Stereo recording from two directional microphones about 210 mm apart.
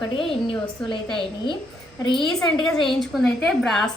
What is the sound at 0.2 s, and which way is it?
Speech, 25° left (ahead or behind).